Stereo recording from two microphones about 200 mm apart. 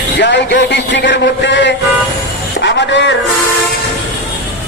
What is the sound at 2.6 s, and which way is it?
Music, 60° left (ahead or behind).